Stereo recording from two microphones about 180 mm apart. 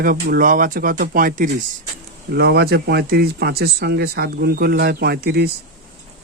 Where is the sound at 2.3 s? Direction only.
65° right (ahead or behind).